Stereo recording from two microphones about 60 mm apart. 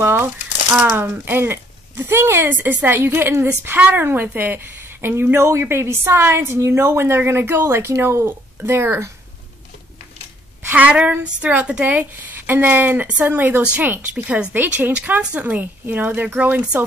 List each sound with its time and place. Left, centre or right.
0.0 s speech: right
2.4 s speech: right
10.6 s a sound: right
10.9 s a woman's voice: right